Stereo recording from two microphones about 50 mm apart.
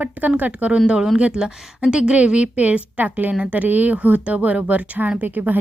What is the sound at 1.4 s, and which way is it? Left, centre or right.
A woman's voice, centre.